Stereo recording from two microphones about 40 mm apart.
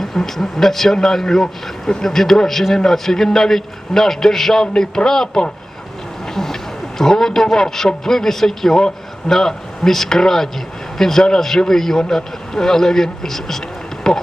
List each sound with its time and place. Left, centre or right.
0.0 s speech: centre
4.6 s speech: left
6.2 s vehicle: centre
7.0 s speech: centre